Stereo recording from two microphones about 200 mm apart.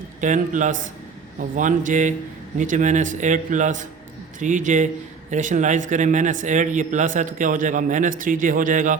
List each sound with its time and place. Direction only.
0.2 s speech: 40° right (ahead or behind)